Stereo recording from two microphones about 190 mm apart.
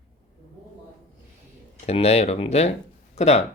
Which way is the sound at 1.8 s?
30° left (ahead or behind).